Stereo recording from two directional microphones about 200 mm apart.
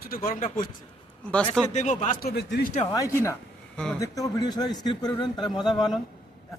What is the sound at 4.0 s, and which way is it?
A man's voice, 20° left (ahead or behind).